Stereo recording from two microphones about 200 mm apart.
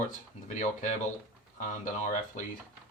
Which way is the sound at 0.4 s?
35° left (ahead or behind).